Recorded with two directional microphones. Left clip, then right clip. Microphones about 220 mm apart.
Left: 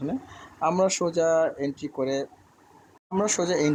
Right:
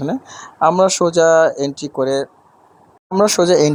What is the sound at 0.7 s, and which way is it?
Speech, 15° right (ahead or behind).